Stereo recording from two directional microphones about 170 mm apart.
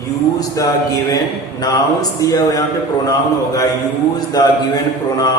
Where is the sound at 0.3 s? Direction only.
20° left (ahead or behind).